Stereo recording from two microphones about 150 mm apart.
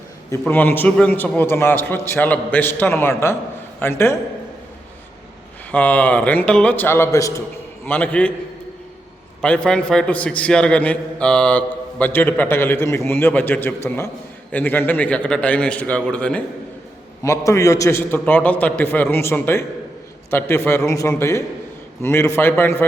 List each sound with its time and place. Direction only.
0.3 s a man's voice: 15° left (ahead or behind)
5.7 s a man's voice: 10° left (ahead or behind)
7.9 s a man's voice: 10° left (ahead or behind)
9.4 s a man's voice: 5° left (ahead or behind)
17.2 s a man's voice: 20° left (ahead or behind)